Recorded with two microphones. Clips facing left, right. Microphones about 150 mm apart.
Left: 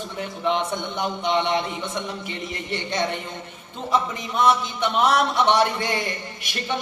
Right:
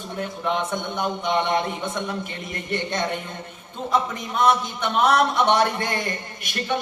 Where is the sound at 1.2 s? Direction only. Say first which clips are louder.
Even; 50° right (ahead or behind).